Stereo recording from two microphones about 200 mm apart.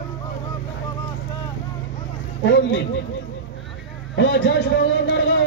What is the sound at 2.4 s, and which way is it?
Speech, 60° left (ahead or behind).